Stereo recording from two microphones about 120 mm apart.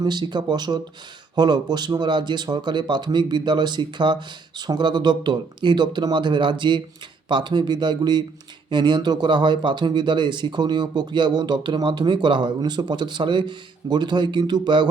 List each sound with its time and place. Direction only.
0.0 s speech: 35° right (ahead or behind)